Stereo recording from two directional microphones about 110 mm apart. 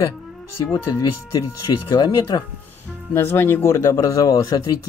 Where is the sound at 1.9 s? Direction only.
40° left (ahead or behind).